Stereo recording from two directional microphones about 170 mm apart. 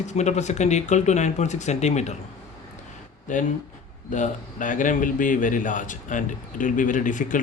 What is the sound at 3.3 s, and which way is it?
Speech, 50° left (ahead or behind).